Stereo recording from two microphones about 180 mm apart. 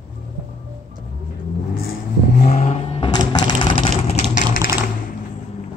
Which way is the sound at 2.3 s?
40° left (ahead or behind).